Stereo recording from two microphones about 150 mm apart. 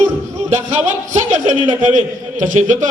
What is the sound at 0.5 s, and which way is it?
A man's voice, 50° right (ahead or behind).